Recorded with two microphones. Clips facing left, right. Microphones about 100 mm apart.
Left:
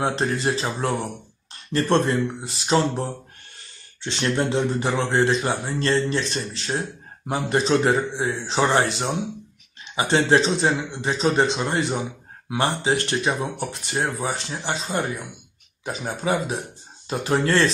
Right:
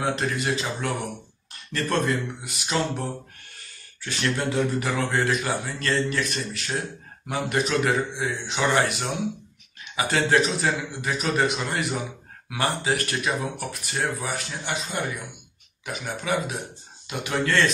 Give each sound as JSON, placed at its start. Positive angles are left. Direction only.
{"t": 0.0, "sound": "a man's voice", "side_deg": 30}